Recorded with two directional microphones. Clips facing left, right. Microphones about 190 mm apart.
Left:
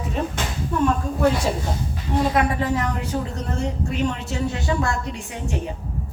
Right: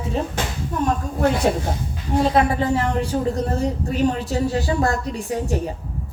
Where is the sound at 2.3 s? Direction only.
30° right (ahead or behind).